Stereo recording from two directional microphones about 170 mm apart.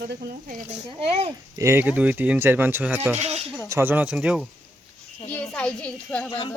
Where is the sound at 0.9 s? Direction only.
35° right (ahead or behind).